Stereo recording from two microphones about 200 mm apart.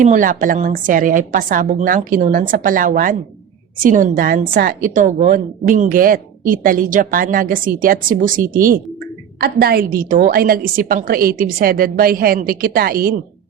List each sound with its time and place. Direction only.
0.0 s a woman's voice: 40° right (ahead or behind)